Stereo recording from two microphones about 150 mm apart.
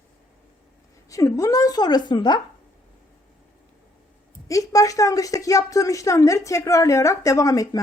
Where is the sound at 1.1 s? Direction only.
20° left (ahead or behind).